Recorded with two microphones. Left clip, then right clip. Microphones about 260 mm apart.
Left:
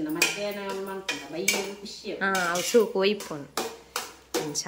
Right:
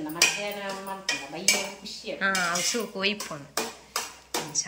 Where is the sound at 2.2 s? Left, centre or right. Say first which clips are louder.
Even; centre.